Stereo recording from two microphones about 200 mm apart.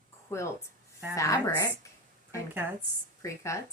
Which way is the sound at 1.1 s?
15° left (ahead or behind).